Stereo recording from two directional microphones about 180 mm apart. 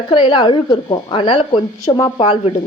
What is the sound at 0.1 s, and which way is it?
A woman's voice, 25° left (ahead or behind).